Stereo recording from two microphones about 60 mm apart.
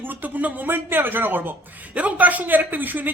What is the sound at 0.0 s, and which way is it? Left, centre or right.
Speech, right.